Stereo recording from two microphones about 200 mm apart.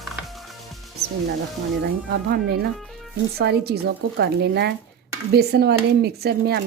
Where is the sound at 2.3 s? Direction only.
55° right (ahead or behind).